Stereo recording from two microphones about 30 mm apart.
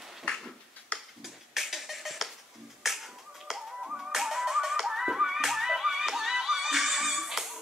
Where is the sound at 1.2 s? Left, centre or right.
Centre.